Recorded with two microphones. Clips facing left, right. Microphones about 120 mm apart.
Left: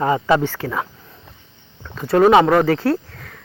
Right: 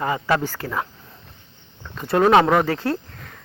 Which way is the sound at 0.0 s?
20° left (ahead or behind).